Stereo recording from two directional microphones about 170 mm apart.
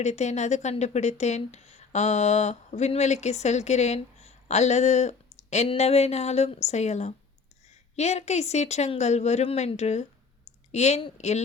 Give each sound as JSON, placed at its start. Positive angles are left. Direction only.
{"t": 0.0, "sound": "speech", "side_deg": 40}